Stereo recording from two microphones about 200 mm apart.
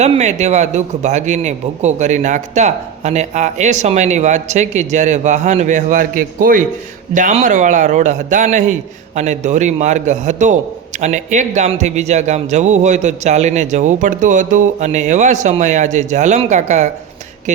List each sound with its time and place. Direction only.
0.0 s a man's voice: 35° right (ahead or behind)